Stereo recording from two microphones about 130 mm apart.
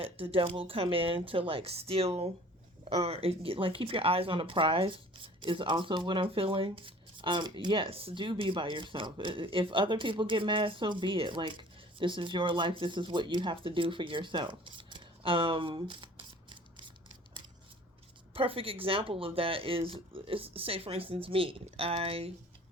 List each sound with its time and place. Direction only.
0.0 s speech: 45° right (ahead or behind)
18.3 s speech: 45° right (ahead or behind)